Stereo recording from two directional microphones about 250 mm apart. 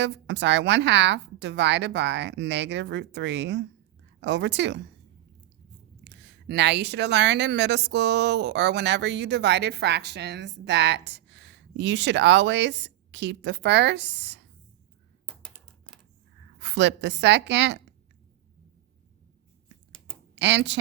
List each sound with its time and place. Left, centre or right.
0.0 s a woman's voice: right
6.1 s a woman's voice: right
15.3 s computer keyboard: centre
16.6 s a woman's voice: right
20.3 s speech: right